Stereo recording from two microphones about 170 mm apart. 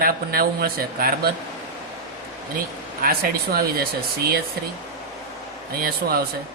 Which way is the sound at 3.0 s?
60° right (ahead or behind).